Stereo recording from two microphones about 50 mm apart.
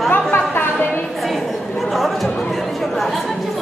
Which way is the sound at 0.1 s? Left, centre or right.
Left.